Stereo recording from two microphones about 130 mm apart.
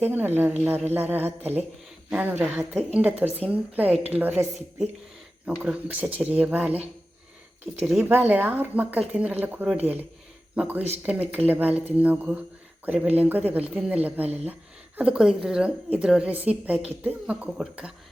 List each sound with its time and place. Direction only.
0.0 s a woman's voice: 15° right (ahead or behind)
5.5 s a woman's voice: 10° right (ahead or behind)
8.0 s a woman's voice: 15° right (ahead or behind)